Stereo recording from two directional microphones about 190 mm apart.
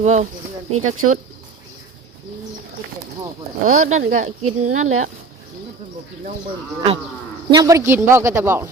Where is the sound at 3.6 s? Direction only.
45° right (ahead or behind).